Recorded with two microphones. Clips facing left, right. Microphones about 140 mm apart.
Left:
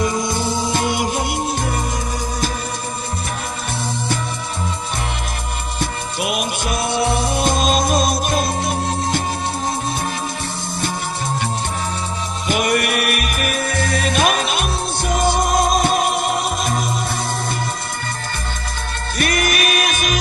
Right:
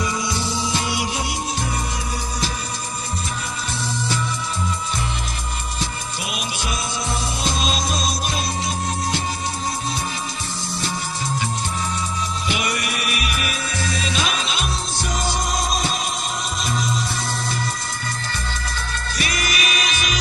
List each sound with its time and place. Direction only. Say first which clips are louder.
0.0 s music: left 5 dB; 50° left (ahead or behind)
5.8 s music: left 8 dB; 55° left (ahead or behind)
12.5 s music: left 9 dB; 50° left (ahead or behind)
19.1 s music: left 7 dB; 55° left (ahead or behind)